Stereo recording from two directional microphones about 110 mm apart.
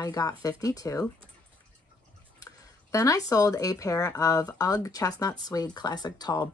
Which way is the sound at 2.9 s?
30° left (ahead or behind).